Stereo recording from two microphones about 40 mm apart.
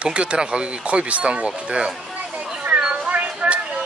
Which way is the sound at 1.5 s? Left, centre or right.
Right.